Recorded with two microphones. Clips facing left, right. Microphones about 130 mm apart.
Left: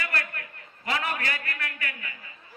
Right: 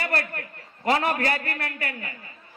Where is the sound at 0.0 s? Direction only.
35° right (ahead or behind).